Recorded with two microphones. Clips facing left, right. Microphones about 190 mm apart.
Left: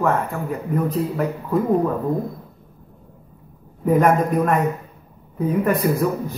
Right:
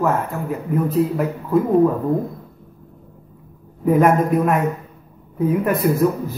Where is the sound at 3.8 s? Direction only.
Centre (ahead or behind).